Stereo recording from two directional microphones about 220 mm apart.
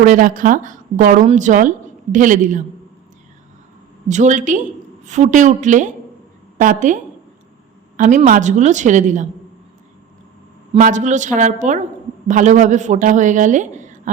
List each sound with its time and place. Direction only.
0.0 s a man's voice: 35° right (ahead or behind)
4.1 s a man's voice: 35° right (ahead or behind)
10.8 s a man's voice: 35° right (ahead or behind)